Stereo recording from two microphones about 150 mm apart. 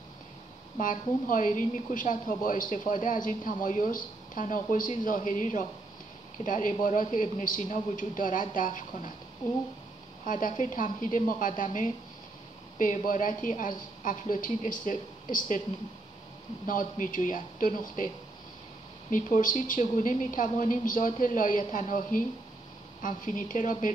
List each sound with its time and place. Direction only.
0.7 s a woman's voice: 65° left (ahead or behind)
10.2 s a woman's voice: 60° left (ahead or behind)
16.6 s a woman's voice: 65° left (ahead or behind)